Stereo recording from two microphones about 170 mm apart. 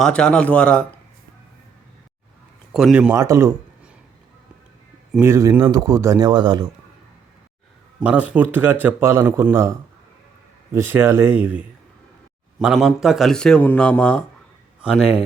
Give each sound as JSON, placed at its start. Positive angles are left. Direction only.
{"t": 0.0, "sound": "a man's voice", "side_deg": 5}
{"t": 2.7, "sound": "a man's voice", "side_deg": -5}
{"t": 3.2, "sound": "a man's voice", "side_deg": -15}
{"t": 5.1, "sound": "speech", "side_deg": -15}
{"t": 8.0, "sound": "a man's voice", "side_deg": -5}
{"t": 14.8, "sound": "speech", "side_deg": -5}